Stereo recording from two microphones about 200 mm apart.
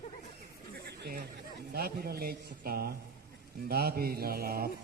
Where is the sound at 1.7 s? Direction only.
50° right (ahead or behind).